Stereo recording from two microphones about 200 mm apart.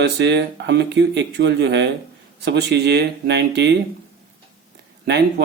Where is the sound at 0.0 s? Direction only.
60° right (ahead or behind).